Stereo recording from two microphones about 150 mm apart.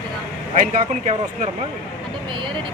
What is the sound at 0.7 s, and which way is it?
Speech, 55° right (ahead or behind).